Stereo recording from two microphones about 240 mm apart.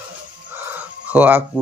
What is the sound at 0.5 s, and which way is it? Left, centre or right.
Chicken, centre.